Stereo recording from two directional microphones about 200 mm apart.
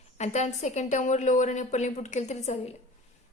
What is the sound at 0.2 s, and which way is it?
A woman's voice, 35° left (ahead or behind).